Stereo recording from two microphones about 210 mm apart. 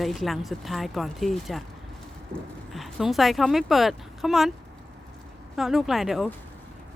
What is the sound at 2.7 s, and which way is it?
Speech, centre (ahead or behind).